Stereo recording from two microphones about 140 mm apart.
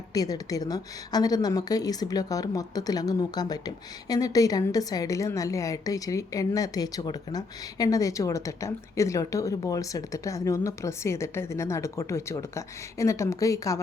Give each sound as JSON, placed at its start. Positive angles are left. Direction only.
{"t": 0.1, "sound": "a woman's voice", "side_deg": 25}